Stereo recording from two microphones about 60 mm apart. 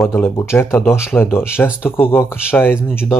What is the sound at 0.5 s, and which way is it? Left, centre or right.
Speech, left.